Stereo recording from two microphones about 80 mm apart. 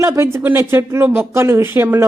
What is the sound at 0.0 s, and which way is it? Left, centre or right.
A woman's voice, right.